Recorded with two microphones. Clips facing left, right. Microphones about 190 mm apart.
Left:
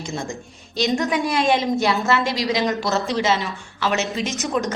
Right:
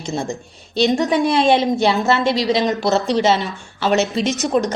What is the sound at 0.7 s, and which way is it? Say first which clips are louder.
A woman's voice: right 5 dB; 30° right (ahead or behind).